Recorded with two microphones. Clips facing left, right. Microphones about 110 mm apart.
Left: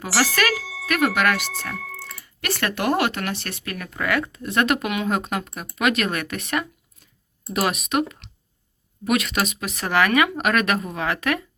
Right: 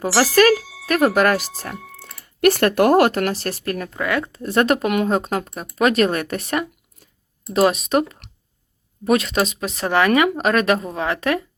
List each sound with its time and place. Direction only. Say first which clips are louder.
0.0 s speech: right 7 dB; 35° right (ahead or behind)
3.9 s speech: left 1 dB; 20° right (ahead or behind)
4.3 s speech: right 4 dB; 35° right (ahead or behind)
7.5 s speech: right 6 dB; 30° right (ahead or behind)